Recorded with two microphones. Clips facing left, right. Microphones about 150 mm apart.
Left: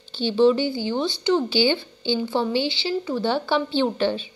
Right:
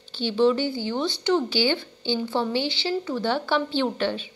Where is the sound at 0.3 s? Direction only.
30° left (ahead or behind).